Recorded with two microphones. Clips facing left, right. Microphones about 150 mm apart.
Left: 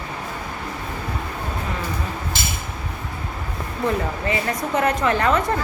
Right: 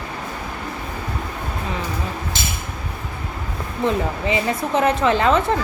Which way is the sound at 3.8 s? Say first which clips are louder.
Right 2 dB; 20° right (ahead or behind).